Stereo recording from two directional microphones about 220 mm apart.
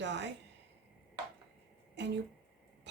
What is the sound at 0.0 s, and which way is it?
Speech, 55° right (ahead or behind).